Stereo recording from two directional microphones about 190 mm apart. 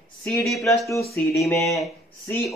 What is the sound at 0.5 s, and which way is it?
Speech, centre (ahead or behind).